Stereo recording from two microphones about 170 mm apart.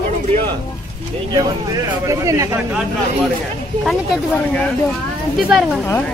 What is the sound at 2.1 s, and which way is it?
Speech, 20° right (ahead or behind).